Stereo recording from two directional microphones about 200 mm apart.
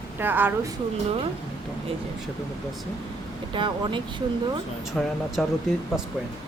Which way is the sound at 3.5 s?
25° right (ahead or behind).